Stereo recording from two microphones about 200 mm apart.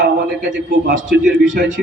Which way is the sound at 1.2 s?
40° right (ahead or behind).